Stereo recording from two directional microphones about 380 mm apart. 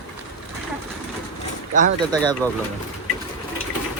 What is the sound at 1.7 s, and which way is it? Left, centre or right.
Speech, centre.